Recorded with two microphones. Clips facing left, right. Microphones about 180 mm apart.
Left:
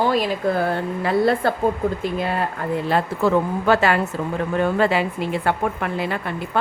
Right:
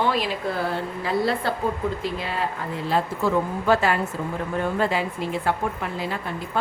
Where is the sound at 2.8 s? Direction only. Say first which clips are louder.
Left 2 dB; 65° left (ahead or behind).